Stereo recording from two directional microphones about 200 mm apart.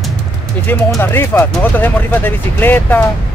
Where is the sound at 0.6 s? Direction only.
10° left (ahead or behind).